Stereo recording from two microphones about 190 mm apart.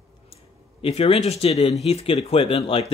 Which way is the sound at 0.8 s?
30° left (ahead or behind).